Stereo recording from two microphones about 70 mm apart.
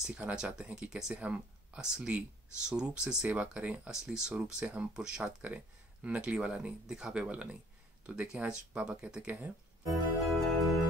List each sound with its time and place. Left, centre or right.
0.2 s speech: centre
10.2 s music: centre